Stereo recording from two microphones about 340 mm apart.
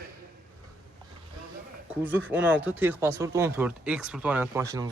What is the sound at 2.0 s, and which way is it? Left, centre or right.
Speech, centre.